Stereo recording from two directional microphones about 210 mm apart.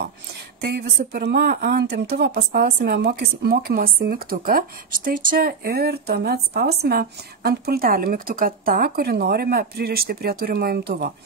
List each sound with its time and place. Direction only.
0.6 s speech: 50° right (ahead or behind)